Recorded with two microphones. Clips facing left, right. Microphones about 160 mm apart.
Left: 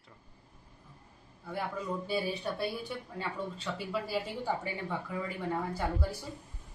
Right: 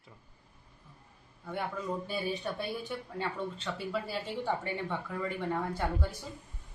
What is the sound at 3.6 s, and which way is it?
Speech, 5° left (ahead or behind).